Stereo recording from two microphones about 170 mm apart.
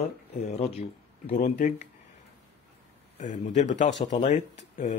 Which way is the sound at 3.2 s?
45° left (ahead or behind).